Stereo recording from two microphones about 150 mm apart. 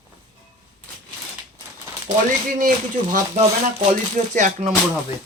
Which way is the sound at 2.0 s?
65° right (ahead or behind).